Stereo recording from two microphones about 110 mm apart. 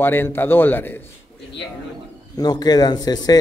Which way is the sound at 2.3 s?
40° left (ahead or behind).